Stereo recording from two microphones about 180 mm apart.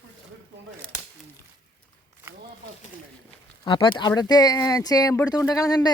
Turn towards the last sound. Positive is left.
turn(degrees=20)  # may be behind; listen again after turning